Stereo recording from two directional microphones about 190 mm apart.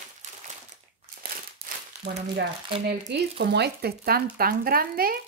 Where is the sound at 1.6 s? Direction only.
50° right (ahead or behind).